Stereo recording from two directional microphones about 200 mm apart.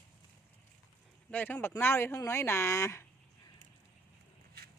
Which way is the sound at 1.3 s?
10° left (ahead or behind).